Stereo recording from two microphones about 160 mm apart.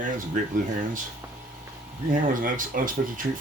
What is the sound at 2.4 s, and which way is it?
Speech, 60° right (ahead or behind).